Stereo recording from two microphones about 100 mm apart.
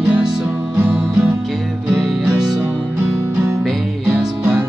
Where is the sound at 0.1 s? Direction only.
10° right (ahead or behind).